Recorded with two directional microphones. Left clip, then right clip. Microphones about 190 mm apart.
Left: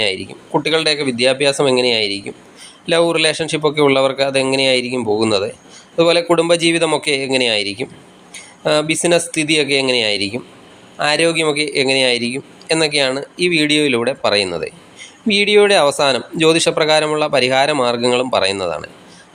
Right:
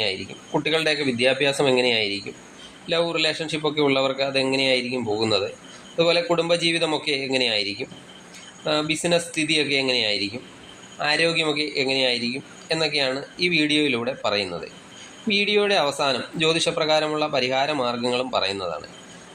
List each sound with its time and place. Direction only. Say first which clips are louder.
0.0 s a man's voice: left 7 dB; 20° left (ahead or behind)
2.8 s a man's voice: left 8 dB; 35° left (ahead or behind)